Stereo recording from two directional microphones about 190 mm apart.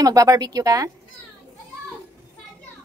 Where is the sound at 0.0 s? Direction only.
15° right (ahead or behind).